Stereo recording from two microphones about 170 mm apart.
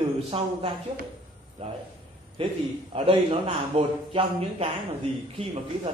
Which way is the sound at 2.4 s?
30° right (ahead or behind).